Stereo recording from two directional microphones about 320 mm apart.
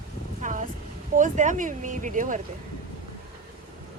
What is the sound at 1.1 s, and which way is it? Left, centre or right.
Speech, right.